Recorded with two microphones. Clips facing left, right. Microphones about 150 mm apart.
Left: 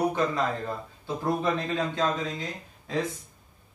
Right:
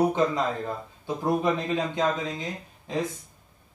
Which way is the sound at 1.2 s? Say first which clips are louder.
Right 2 dB; 15° right (ahead or behind).